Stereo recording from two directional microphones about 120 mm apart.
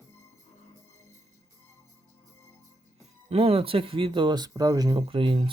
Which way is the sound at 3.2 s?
55° right (ahead or behind).